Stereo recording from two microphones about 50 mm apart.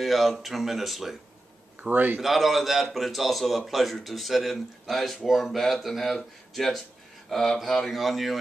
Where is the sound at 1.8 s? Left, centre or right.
Right.